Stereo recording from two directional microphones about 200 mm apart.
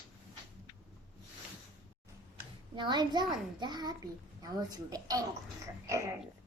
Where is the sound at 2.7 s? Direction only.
20° right (ahead or behind).